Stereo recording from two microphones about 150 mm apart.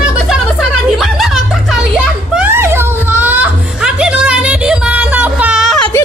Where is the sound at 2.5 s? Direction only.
15° right (ahead or behind).